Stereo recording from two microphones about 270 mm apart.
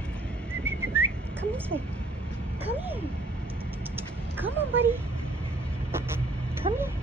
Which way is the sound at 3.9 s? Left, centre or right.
Centre.